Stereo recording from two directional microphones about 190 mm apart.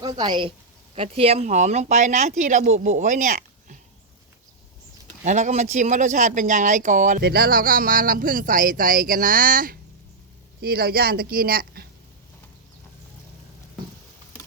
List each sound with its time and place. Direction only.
0.1 s a woman's voice: 25° right (ahead or behind); by 3.8 s 40° right (ahead or behind)
5.2 s speech: 40° right (ahead or behind)
7.2 s speech: 55° right (ahead or behind)